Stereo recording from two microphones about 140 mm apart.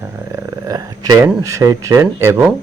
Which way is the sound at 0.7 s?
25° right (ahead or behind).